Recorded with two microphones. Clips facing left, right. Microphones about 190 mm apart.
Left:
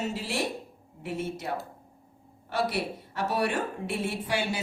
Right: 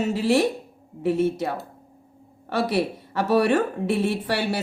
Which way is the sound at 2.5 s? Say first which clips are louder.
Right 6 dB; 90° right.